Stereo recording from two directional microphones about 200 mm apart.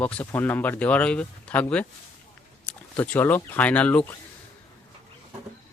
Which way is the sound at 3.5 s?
5° left (ahead or behind).